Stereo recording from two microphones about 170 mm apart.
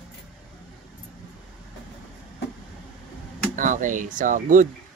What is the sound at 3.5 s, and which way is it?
Speech, 50° right (ahead or behind).